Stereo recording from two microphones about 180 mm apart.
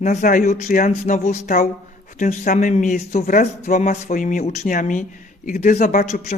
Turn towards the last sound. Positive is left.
turn(degrees=40)  # may be behind; listen again after turning